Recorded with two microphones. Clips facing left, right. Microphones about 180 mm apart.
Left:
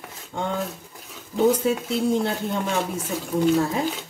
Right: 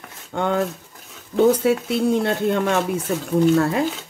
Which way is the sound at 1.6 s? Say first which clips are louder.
Right 4 dB; 70° right (ahead or behind).